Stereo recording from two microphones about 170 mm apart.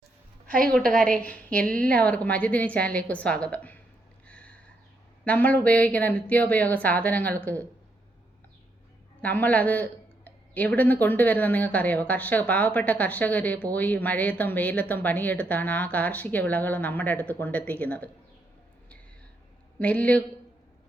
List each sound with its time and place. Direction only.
0.7 s a woman's voice: 5° left (ahead or behind)
4.3 s a sound: 5° left (ahead or behind)
5.2 s speech: 10° left (ahead or behind)
9.2 s speech: 10° left (ahead or behind)
19.8 s speech: 10° left (ahead or behind)